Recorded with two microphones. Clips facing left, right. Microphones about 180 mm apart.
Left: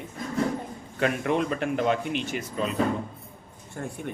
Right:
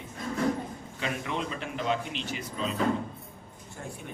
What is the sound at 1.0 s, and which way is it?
Speech, 55° left (ahead or behind).